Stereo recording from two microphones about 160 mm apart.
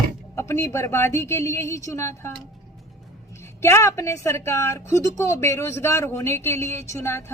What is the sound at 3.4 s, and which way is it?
A woman's voice, 15° left (ahead or behind).